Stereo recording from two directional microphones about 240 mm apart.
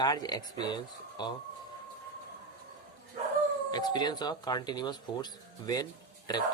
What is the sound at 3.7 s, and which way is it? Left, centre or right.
Speech, centre.